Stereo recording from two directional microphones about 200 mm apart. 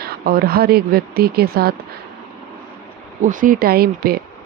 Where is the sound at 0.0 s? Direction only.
50° right (ahead or behind).